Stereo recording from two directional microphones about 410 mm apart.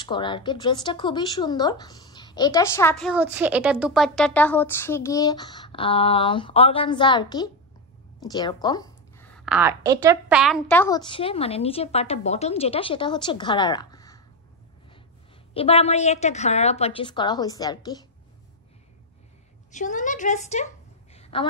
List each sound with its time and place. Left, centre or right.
0.0 s speech: centre
15.5 s speech: centre
19.7 s speech: centre
21.1 s a sound: centre